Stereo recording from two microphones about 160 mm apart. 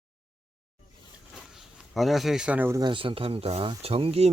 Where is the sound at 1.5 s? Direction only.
Centre (ahead or behind).